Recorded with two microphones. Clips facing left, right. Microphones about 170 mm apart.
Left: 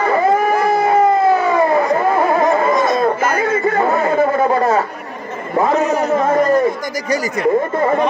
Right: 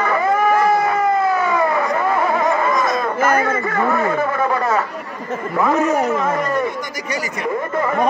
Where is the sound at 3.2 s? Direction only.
50° right (ahead or behind).